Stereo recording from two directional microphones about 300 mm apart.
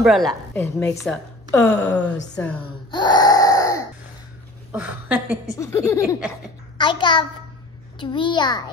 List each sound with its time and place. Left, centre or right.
0.0 s a woman's voice: centre
2.9 s a sound: centre
4.7 s a woman's voice: centre
5.6 s a child's voice: centre